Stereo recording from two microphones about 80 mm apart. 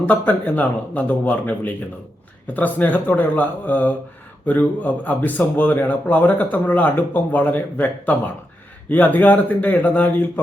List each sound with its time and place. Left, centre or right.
0.1 s speech: left